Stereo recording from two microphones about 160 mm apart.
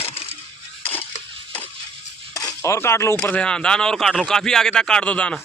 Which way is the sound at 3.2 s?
5° left (ahead or behind).